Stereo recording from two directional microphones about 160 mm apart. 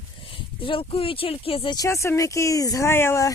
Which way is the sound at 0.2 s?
35° left (ahead or behind).